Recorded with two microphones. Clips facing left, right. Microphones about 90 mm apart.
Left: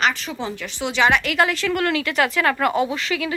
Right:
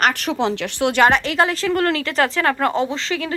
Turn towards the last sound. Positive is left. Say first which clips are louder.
# even
turn(degrees=-30)  # may be behind; listen again after turning